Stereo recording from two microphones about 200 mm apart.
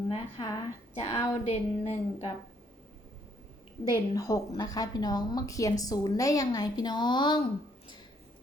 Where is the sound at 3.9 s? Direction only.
15° left (ahead or behind).